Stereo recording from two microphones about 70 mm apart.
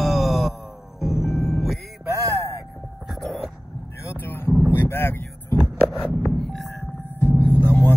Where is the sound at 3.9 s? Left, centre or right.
Left.